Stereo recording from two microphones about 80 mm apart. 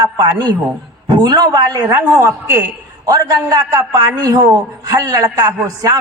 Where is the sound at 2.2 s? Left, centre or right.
Right.